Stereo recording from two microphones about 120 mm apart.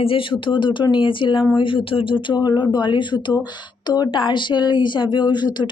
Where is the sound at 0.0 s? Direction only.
50° left (ahead or behind).